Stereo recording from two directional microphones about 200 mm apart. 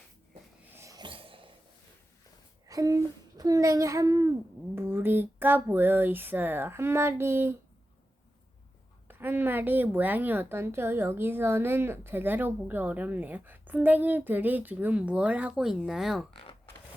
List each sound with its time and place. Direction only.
0.7 s a sound: 15° right (ahead or behind)
2.6 s a child's voice: 15° right (ahead or behind)
9.0 s a woman's voice: 10° right (ahead or behind)